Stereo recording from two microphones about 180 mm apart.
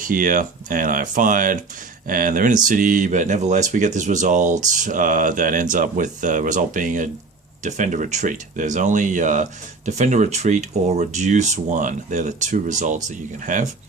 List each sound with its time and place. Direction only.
0.0 s speech: 50° right (ahead or behind)